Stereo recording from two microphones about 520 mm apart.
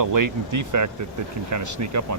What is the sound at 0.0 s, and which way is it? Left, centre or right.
Speech, right.